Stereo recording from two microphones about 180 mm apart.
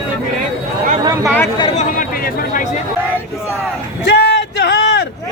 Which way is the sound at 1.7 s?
45° left (ahead or behind).